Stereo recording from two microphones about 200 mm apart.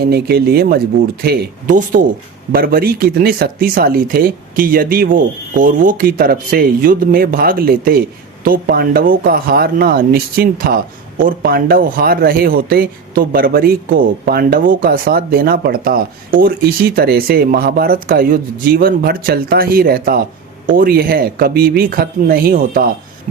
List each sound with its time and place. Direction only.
0.0 s speech: 50° right (ahead or behind)